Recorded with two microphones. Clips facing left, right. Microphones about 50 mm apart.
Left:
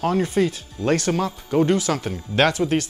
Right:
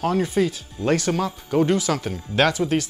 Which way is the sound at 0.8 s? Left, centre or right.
Centre.